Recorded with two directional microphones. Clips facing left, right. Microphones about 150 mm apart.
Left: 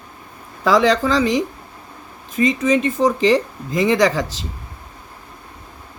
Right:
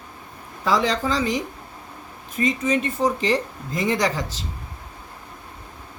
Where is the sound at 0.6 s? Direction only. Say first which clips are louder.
Left 6 dB; 85° left.